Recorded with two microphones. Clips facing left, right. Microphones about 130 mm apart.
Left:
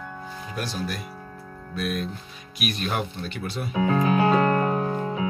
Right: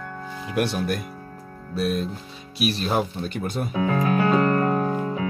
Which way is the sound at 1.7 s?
35° right (ahead or behind).